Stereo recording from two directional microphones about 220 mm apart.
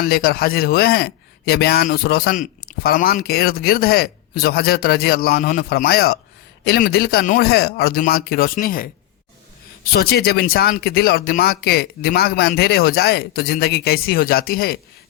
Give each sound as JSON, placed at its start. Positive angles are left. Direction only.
{"t": 0.0, "sound": "a man's voice", "side_deg": 45}
{"t": 9.9, "sound": "a man's voice", "side_deg": 45}